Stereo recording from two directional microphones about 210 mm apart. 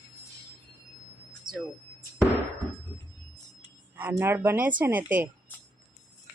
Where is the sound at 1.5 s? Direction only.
20° right (ahead or behind).